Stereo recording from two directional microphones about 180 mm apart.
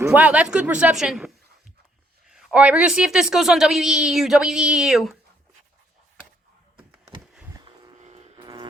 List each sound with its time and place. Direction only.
0.0 s a woman's voice: 10° right (ahead or behind)
7.9 s vehicle: 40° right (ahead or behind)
8.4 s a sound: 25° right (ahead or behind)